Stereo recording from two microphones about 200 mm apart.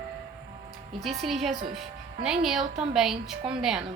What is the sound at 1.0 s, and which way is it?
A woman's voice, centre (ahead or behind).